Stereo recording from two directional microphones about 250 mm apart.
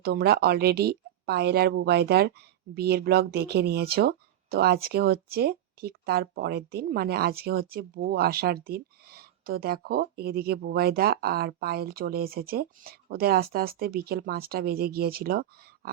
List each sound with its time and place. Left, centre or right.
0.0 s speech: right